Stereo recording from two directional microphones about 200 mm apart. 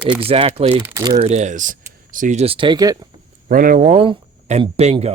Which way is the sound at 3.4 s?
45° right (ahead or behind).